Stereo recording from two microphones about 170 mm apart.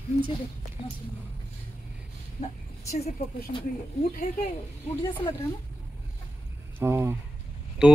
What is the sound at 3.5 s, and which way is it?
Speech, 45° left (ahead or behind).